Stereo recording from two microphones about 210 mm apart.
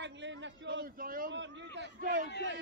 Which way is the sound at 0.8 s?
45° right (ahead or behind).